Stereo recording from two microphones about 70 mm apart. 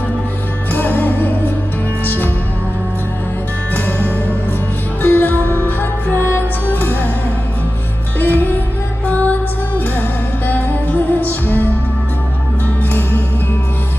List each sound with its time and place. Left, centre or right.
0.7 s music: left
5.0 s music: left
8.2 s music: left
10.4 s music: left
12.9 s music: left